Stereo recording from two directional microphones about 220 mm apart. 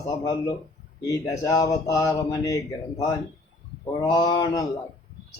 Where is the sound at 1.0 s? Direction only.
15° left (ahead or behind).